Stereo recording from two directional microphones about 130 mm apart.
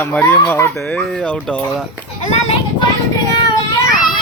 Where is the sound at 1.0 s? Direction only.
5° left (ahead or behind).